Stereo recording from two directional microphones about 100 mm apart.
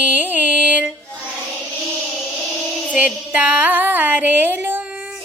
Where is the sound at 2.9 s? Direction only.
15° right (ahead or behind).